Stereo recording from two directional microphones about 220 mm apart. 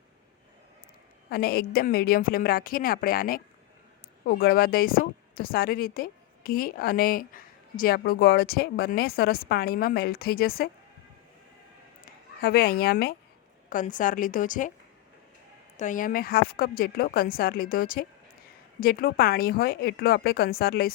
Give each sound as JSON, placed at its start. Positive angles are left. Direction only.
{"t": 1.3, "sound": "speech", "side_deg": 45}
{"t": 12.4, "sound": "speech", "side_deg": 40}
{"t": 15.8, "sound": "speech", "side_deg": 35}